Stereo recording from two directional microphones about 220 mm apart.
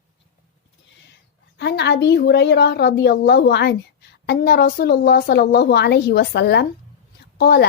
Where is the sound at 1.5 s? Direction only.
50° left (ahead or behind).